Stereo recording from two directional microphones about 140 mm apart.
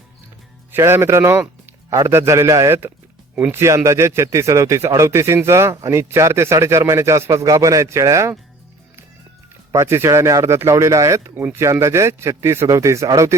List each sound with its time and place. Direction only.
0.7 s speech: 15° right (ahead or behind)
9.7 s speech: 20° right (ahead or behind)